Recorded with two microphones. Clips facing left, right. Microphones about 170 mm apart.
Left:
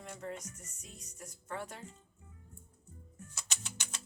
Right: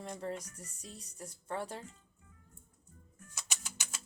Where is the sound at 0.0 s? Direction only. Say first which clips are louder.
Right 3 dB; 35° right (ahead or behind).